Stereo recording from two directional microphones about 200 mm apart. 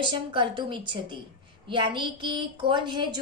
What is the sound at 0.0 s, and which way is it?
A woman's voice, 25° right (ahead or behind).